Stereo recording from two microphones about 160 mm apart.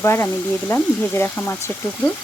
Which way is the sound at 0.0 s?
15° left (ahead or behind).